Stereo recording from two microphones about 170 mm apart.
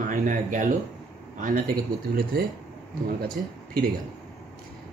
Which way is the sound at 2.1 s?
60° right (ahead or behind).